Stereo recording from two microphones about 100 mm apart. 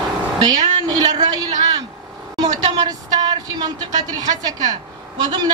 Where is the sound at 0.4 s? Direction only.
40° right (ahead or behind).